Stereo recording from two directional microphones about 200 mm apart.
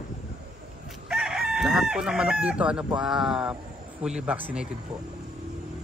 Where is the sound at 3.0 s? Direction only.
Centre (ahead or behind).